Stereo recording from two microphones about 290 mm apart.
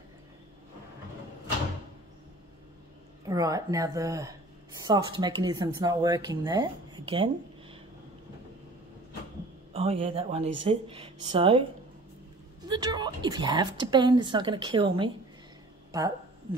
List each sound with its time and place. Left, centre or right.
3.3 s a woman's voice: centre
9.8 s speech: centre
12.6 s a woman's voice: centre